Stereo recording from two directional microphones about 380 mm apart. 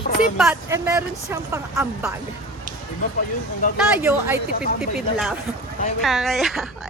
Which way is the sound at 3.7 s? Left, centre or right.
Centre.